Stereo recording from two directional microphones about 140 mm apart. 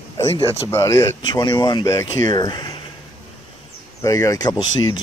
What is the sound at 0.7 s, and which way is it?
Speech, 20° left (ahead or behind).